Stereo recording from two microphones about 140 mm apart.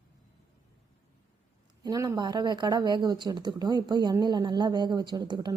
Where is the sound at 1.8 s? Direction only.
25° right (ahead or behind).